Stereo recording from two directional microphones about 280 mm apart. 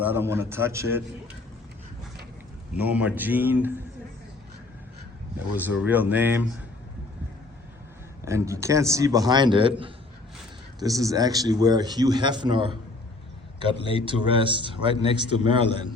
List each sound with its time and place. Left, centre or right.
0.0 s a man's voice: centre
2.7 s a man's voice: centre
5.5 s a man's voice: centre
8.2 s a man's voice: centre
13.8 s a man's voice: centre